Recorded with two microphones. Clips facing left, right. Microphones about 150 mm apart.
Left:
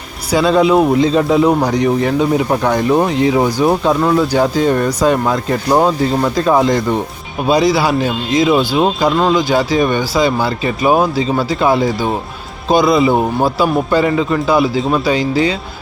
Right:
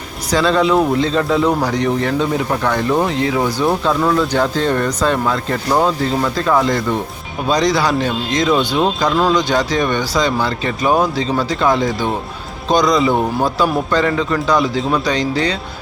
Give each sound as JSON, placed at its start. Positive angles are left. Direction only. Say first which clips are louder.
{"t": 0.3, "sound": "speech", "louder": "left 3 dB", "side_deg": 10}
{"t": 7.4, "sound": "speech", "louder": "left 3 dB", "side_deg": 10}